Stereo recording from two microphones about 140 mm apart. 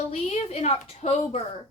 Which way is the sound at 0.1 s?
50° left (ahead or behind).